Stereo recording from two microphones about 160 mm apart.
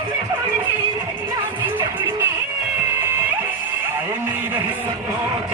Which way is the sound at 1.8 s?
15° right (ahead or behind).